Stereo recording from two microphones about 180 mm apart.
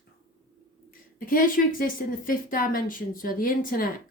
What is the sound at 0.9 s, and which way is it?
A woman's voice, 50° left (ahead or behind).